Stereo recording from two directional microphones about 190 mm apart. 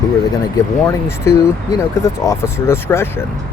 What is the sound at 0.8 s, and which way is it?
Speech, 15° left (ahead or behind).